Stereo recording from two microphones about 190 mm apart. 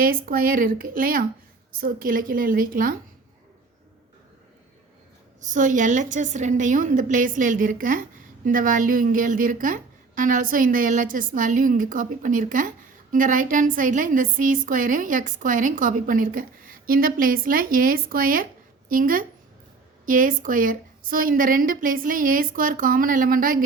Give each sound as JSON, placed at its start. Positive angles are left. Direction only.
{"t": 0.0, "sound": "a woman's voice", "side_deg": -50}
{"t": 5.4, "sound": "a woman's voice", "side_deg": -40}